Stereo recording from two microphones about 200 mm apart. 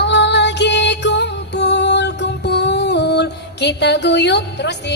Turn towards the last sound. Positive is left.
turn(degrees=60)  # may be behind; listen again after turning